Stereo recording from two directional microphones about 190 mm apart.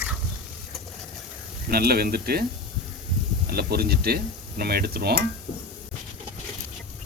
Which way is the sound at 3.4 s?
55° right (ahead or behind).